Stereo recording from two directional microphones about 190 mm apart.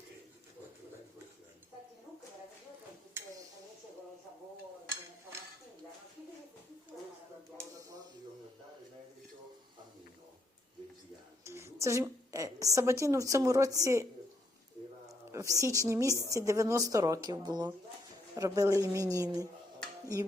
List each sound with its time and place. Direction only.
3.2 s a sound: 15° right (ahead or behind)
11.4 s a woman's voice: 15° right (ahead or behind)
15.3 s speech: 15° right (ahead or behind)